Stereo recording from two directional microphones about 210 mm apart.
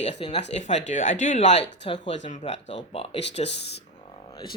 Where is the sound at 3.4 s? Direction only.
55° left (ahead or behind).